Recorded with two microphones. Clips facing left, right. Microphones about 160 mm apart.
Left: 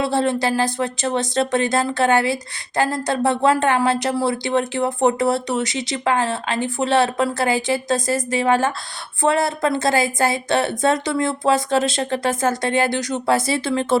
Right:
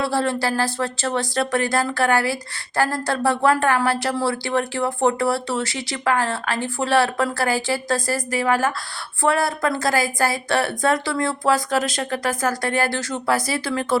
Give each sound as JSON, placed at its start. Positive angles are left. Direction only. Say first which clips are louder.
{"t": 0.0, "sound": "speech", "louder": "left 2 dB", "side_deg": 20}